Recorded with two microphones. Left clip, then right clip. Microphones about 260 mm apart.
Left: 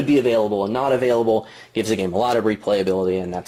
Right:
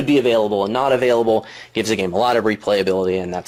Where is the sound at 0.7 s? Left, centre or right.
Centre.